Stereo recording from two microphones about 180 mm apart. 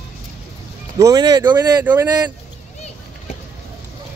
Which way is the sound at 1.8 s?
10° right (ahead or behind).